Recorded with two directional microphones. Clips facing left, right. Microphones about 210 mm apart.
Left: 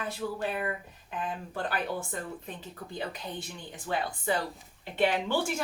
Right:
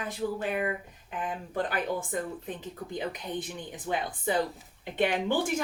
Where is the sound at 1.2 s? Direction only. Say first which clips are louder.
Right 3 dB; 15° right (ahead or behind).